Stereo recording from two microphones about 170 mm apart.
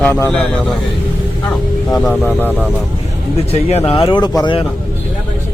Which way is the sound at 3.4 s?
35° left (ahead or behind).